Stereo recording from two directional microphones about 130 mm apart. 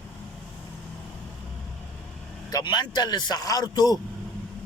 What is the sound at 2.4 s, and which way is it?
Speech, 30° left (ahead or behind).